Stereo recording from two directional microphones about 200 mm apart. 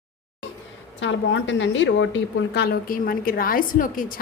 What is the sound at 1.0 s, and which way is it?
A woman's voice, 65° left (ahead or behind).